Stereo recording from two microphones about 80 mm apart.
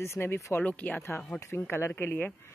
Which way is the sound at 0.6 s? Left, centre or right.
Left.